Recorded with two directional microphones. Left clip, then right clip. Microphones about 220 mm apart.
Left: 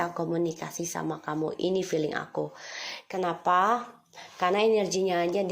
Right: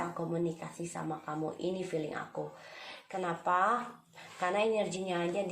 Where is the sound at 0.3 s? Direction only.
40° left (ahead or behind).